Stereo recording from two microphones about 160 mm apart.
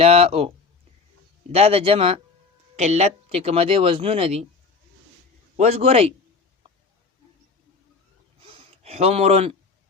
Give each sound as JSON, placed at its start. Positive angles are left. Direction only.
{"t": 0.0, "sound": "speech", "side_deg": -40}
{"t": 1.5, "sound": "speech", "side_deg": -40}
{"t": 5.5, "sound": "speech", "side_deg": -40}
{"t": 8.4, "sound": "gasp", "side_deg": -40}